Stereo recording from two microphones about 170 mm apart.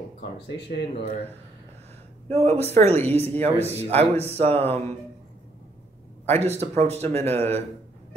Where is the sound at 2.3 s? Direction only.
35° right (ahead or behind).